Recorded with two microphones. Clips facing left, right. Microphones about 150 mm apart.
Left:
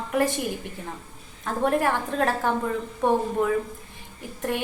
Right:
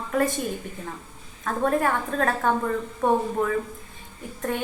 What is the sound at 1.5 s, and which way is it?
A woman's voice, 25° left (ahead or behind).